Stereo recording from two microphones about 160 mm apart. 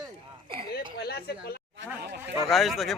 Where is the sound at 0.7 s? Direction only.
80° left.